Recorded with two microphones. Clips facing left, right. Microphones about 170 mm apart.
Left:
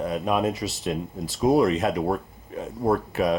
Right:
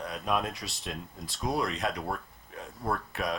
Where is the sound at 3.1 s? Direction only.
Centre (ahead or behind).